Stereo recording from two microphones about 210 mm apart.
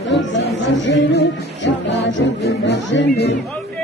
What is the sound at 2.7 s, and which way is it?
Speech, 55° left (ahead or behind).